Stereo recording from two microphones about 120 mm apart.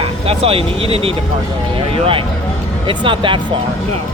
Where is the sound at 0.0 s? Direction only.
50° right (ahead or behind).